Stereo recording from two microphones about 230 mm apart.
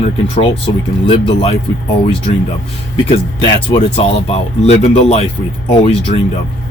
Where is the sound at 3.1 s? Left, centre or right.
Left.